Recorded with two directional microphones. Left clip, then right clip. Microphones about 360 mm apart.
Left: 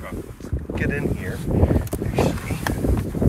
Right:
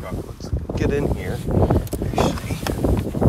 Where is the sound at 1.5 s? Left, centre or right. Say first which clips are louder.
Right 1 dB; centre.